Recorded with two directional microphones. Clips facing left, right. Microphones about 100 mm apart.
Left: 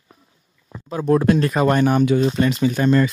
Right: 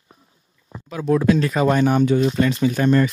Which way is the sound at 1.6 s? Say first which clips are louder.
Even; 55° left (ahead or behind).